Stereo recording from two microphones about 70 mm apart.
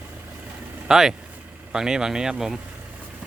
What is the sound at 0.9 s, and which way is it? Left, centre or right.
Speech, centre.